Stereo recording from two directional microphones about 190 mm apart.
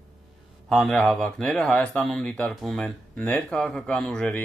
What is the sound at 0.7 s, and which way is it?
Speech, centre (ahead or behind).